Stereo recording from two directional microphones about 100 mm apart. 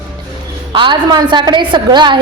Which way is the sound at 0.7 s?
55° right (ahead or behind).